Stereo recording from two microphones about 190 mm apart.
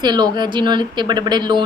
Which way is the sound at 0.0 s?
25° right (ahead or behind).